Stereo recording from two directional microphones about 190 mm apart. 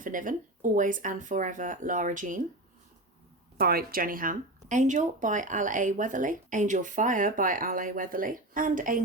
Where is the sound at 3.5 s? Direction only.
55° right (ahead or behind).